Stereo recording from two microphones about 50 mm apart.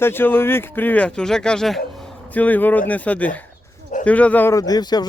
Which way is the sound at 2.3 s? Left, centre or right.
Left.